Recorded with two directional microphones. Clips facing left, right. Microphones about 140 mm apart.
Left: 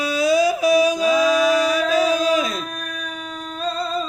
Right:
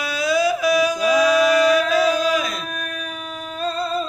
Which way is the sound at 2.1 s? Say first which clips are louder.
Left 2 dB; 20° left (ahead or behind).